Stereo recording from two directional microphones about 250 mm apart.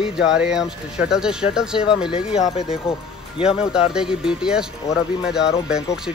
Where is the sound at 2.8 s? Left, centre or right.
Centre.